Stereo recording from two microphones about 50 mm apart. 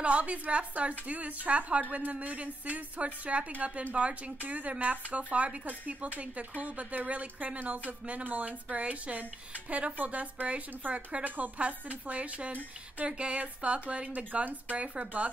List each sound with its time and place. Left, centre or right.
0.0 s a woman's voice: right